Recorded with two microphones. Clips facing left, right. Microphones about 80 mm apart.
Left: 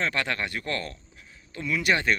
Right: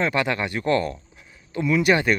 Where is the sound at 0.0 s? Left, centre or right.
Centre.